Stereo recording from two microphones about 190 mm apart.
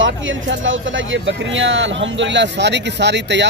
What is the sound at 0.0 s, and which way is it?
Speech, 80° right.